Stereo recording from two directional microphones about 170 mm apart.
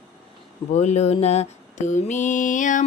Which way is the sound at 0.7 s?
40° left (ahead or behind).